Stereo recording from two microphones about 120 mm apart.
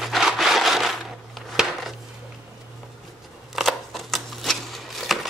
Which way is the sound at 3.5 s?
Centre (ahead or behind).